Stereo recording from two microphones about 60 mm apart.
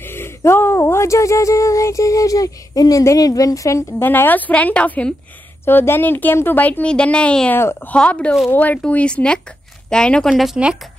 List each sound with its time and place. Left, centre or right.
0.0 s a sound: left
3.2 s a woman's voice: left
4.0 s a woman's voice: left
5.7 s speech: left
6.9 s a woman's voice: centre
10.3 s speech: centre